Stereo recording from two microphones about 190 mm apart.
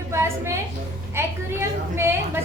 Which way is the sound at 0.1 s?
15° right (ahead or behind).